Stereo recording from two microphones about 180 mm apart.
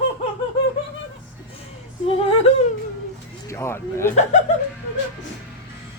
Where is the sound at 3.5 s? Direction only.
15° left (ahead or behind).